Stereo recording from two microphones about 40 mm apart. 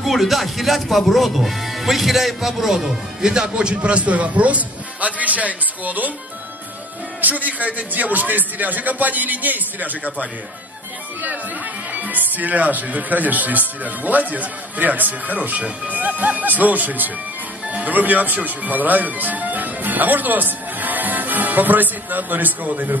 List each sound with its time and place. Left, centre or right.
0.0 s speech: centre
3.5 s a man's voice: right
7.2 s speech: right
11.9 s speech: right